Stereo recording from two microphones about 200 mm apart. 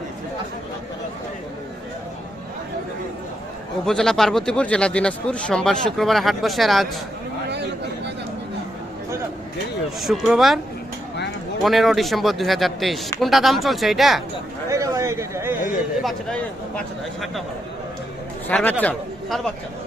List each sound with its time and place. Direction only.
3.8 s speech: centre (ahead or behind)
7.4 s a sound: 55° right (ahead or behind)
10.0 s speech: centre (ahead or behind)
11.6 s speech: centre (ahead or behind)
14.7 s a sound: 15° right (ahead or behind)
16.0 s speech: 5° left (ahead or behind)
18.4 s a man's voice: 10° left (ahead or behind)